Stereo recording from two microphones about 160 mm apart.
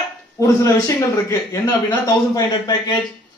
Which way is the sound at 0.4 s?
20° left (ahead or behind).